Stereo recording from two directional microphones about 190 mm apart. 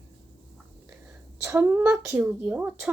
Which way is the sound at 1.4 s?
10° right (ahead or behind).